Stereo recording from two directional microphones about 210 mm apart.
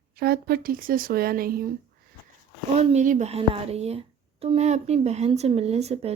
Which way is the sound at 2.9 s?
35° right (ahead or behind).